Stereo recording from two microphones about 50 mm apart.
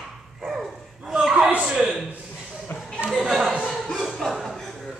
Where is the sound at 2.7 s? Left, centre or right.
Left.